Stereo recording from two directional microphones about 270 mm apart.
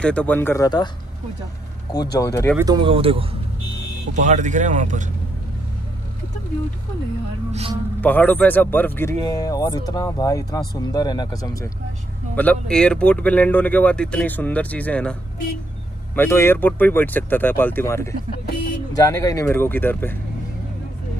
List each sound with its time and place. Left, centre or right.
0.0 s speech: centre
2.1 s speech: centre
2.5 s speech: centre
8.0 s speech: centre
12.4 s speech: centre
16.2 s speech: centre